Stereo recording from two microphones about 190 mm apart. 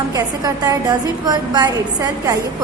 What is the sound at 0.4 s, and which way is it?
A woman's voice, 20° right (ahead or behind).